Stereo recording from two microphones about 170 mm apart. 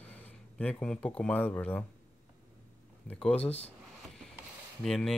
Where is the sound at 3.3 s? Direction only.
40° left (ahead or behind).